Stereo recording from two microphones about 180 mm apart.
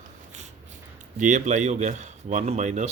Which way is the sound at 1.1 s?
45° right (ahead or behind).